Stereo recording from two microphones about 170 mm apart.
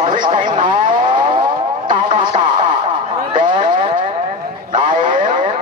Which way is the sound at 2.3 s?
45° right (ahead or behind).